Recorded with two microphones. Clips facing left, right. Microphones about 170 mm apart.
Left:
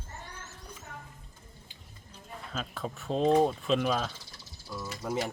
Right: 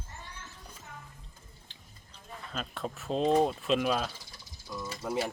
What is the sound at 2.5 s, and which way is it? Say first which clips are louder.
Speech: even; centre (ahead or behind).